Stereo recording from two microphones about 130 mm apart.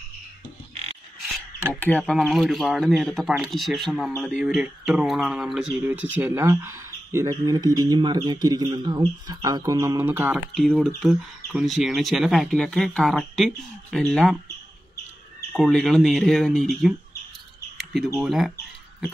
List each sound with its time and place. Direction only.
1.7 s speech: 15° left (ahead or behind); by 10.0 s 25° right (ahead or behind)
10.0 s speech: 15° right (ahead or behind)
10.5 s speech: centre (ahead or behind)
15.5 s speech: 5° left (ahead or behind)
17.7 s a sound: centre (ahead or behind)